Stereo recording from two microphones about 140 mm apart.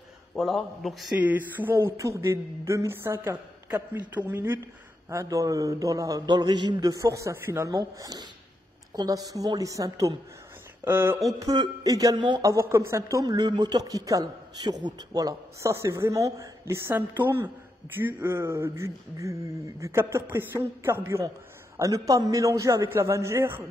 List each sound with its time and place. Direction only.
0.4 s a man's voice: centre (ahead or behind)
1.2 s speech: 15° right (ahead or behind)
11.3 s speech: 25° right (ahead or behind)